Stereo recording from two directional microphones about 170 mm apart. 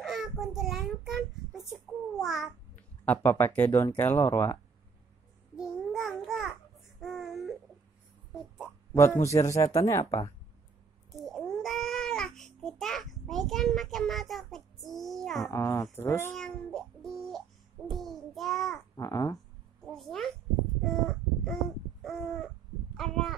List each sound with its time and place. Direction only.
0.0 s child singing: centre (ahead or behind)
1.7 s babbling: centre (ahead or behind)
3.1 s speech: 10° left (ahead or behind)
5.6 s a sound: centre (ahead or behind)
8.9 s speech: 15° left (ahead or behind)
11.1 s babbling: centre (ahead or behind)
15.4 s speech: 20° left (ahead or behind)
16.3 s a sound: centre (ahead or behind)
18.9 s speech: 20° left (ahead or behind)
19.9 s a sound: centre (ahead or behind)
22.0 s crow: centre (ahead or behind)
22.9 s speech: centre (ahead or behind)